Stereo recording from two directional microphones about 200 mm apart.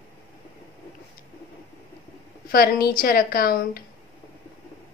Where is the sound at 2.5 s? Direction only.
50° left (ahead or behind).